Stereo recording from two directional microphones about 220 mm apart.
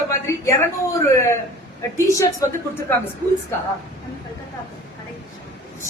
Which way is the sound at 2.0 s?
15° left (ahead or behind).